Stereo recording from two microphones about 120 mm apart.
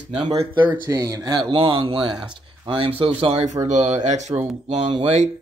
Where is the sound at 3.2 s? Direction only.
60° right (ahead or behind).